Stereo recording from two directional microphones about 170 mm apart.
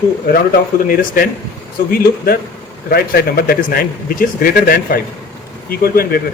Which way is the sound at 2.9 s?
65° left (ahead or behind).